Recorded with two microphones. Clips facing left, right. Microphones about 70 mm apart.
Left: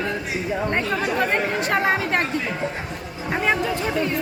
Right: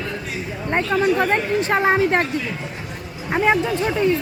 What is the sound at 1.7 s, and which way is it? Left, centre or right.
Speech, right.